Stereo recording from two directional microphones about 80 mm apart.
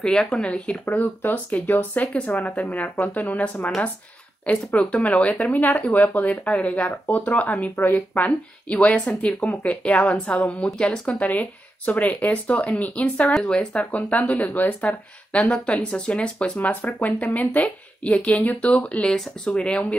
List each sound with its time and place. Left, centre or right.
0.0 s speech: centre